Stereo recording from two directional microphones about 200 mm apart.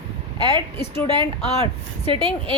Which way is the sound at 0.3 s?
20° right (ahead or behind).